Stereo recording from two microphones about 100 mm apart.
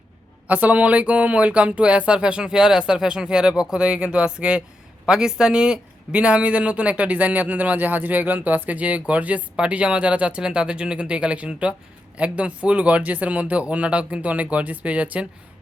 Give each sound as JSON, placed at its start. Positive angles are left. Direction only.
{"t": 0.4, "sound": "a man's voice", "side_deg": -15}